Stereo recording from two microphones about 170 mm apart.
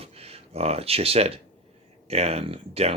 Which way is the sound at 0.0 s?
35° right (ahead or behind).